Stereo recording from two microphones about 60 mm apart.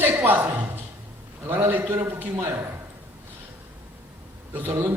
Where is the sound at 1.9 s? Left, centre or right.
Right.